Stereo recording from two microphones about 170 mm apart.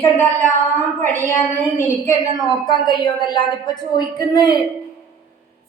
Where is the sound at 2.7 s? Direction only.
25° left (ahead or behind).